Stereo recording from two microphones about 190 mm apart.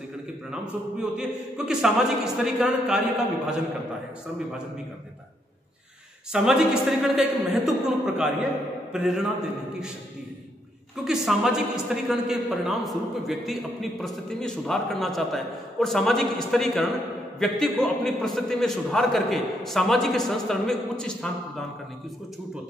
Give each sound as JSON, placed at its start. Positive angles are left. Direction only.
{"t": 0.5, "sound": "a man's voice", "side_deg": -5}
{"t": 6.3, "sound": "a man's voice", "side_deg": -5}
{"t": 11.1, "sound": "a man's voice", "side_deg": 0}